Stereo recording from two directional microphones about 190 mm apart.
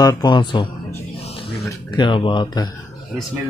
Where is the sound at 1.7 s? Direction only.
25° left (ahead or behind).